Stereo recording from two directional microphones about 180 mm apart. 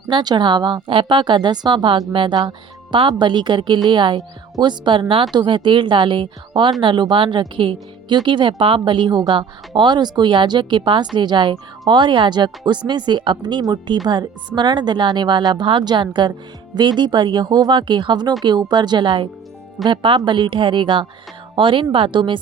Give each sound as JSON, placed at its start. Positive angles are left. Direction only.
{"t": 0.1, "sound": "speech", "side_deg": -25}